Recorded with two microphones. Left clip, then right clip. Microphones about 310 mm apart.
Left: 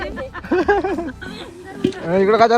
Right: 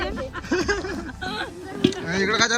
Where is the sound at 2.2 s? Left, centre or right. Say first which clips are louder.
Left 8 dB; centre.